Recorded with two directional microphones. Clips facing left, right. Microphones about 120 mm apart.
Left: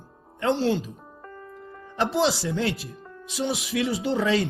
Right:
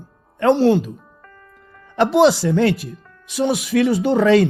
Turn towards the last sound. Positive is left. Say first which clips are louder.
# right 9 dB
turn(degrees=-65)  # may be behind; listen again after turning